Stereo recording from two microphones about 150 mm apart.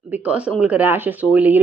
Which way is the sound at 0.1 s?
10° right (ahead or behind).